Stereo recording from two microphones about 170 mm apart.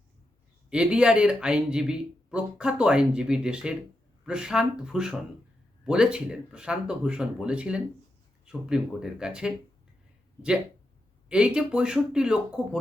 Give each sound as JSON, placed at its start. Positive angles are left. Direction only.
{"t": 0.7, "sound": "speech", "side_deg": -5}
{"t": 11.3, "sound": "speech", "side_deg": -5}